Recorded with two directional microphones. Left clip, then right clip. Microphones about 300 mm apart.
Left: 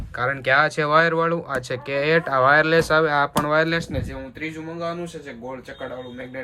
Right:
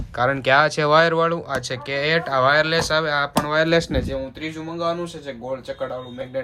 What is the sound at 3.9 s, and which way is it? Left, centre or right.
Speech, right.